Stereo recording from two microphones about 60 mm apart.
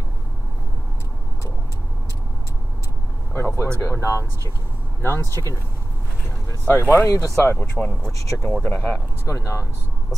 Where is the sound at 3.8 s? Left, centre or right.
Left.